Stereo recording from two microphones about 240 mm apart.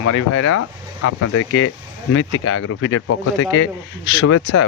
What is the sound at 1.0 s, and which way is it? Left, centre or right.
Speech, left.